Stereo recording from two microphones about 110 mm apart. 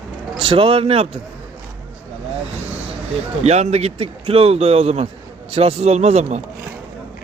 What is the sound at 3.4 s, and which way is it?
Speech, 75° right (ahead or behind).